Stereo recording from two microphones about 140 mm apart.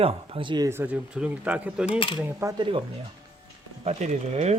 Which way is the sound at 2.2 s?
20° right (ahead or behind).